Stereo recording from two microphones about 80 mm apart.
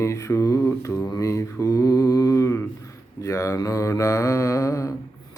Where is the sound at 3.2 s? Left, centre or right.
Left.